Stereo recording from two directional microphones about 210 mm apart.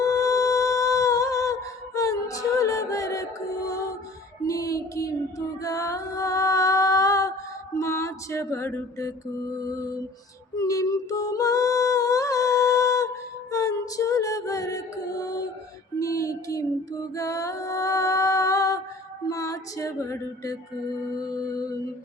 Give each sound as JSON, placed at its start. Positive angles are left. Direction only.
{"t": 0.0, "sound": "humming", "side_deg": 15}
{"t": 4.4, "sound": "a sound", "side_deg": 15}
{"t": 5.5, "sound": "music", "side_deg": 15}
{"t": 9.6, "sound": "lullaby", "side_deg": 15}
{"t": 10.6, "sound": "a sound", "side_deg": 15}
{"t": 13.5, "sound": "music", "side_deg": 15}